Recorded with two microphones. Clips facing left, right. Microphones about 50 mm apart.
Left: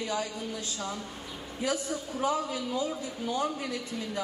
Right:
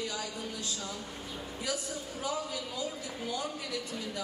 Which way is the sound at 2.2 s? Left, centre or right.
Left.